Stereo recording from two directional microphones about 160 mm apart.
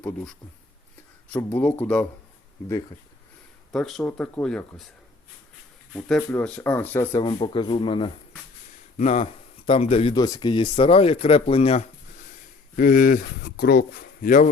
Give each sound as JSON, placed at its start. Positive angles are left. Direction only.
{"t": 0.0, "sound": "speech", "side_deg": 10}
{"t": 3.7, "sound": "speech", "side_deg": 0}
{"t": 5.9, "sound": "speech", "side_deg": 0}
{"t": 7.3, "sound": "speech", "side_deg": 30}
{"t": 9.0, "sound": "speech", "side_deg": 40}
{"t": 10.2, "sound": "speech", "side_deg": 25}
{"t": 12.7, "sound": "speech", "side_deg": 60}